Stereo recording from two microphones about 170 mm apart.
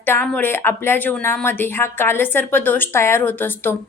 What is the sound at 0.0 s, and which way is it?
A woman's voice, 10° left (ahead or behind).